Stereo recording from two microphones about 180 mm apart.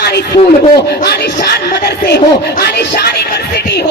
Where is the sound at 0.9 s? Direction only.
65° left (ahead or behind).